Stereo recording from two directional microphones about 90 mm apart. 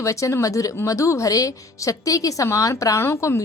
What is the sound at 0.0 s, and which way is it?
Speech, 35° left (ahead or behind).